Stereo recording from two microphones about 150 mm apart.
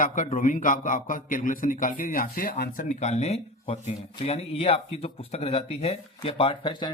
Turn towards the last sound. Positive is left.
turn(degrees=30)  # may be behind; listen again after turning